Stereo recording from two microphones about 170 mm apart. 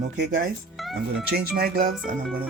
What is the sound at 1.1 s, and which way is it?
Speech, 70° right (ahead or behind).